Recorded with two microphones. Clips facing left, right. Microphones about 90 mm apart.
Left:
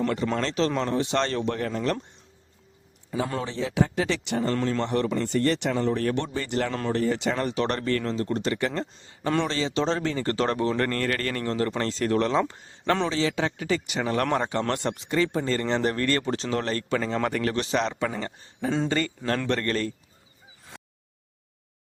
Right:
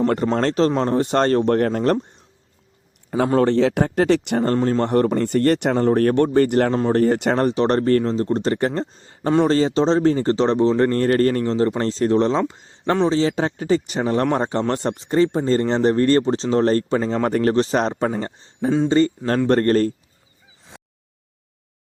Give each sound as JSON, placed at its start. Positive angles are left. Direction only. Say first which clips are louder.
{"t": 0.4, "sound": "speech", "louder": "right 8 dB", "side_deg": -40}
{"t": 3.3, "sound": "speech", "louder": "right 11 dB", "side_deg": -60}
{"t": 4.5, "sound": "speech", "louder": "right 9 dB", "side_deg": -40}
{"t": 7.4, "sound": "speech", "louder": "right 8 dB", "side_deg": -35}
{"t": 13.1, "sound": "speech", "louder": "right 7 dB", "side_deg": -35}
{"t": 18.1, "sound": "a man's voice", "louder": "right 7 dB", "side_deg": -25}
{"t": 19.5, "sound": "speech", "louder": "right 14 dB", "side_deg": -40}